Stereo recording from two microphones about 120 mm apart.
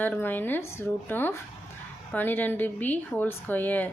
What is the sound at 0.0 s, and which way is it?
A woman's voice, 15° left (ahead or behind).